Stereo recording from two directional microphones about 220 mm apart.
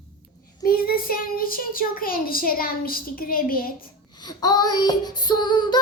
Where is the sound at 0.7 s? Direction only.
40° left (ahead or behind).